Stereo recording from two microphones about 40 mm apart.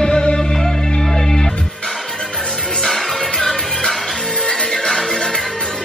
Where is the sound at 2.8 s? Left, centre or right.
Centre.